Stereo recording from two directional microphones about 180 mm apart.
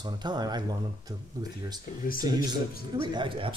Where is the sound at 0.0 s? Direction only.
25° right (ahead or behind).